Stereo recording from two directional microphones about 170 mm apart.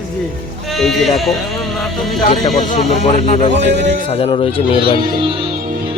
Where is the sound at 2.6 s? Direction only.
45° left (ahead or behind).